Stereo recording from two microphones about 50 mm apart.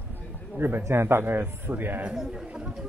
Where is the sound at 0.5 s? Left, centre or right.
Right.